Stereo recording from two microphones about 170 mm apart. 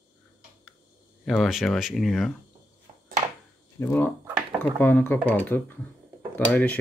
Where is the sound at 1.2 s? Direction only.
Centre (ahead or behind).